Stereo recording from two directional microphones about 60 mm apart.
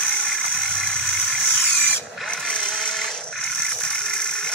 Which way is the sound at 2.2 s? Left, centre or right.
Centre.